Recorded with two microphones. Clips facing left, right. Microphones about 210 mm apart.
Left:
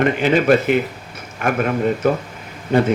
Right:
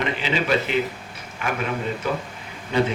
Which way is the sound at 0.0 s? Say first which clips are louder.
Left 9 dB; 50° left (ahead or behind).